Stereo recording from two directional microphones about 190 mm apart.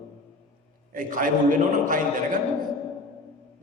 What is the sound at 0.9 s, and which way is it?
A man's voice, 45° right (ahead or behind).